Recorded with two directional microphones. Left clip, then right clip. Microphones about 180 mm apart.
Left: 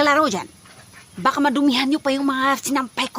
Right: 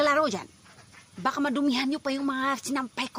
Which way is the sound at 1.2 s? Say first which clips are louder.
Left 9 dB; 15° left (ahead or behind).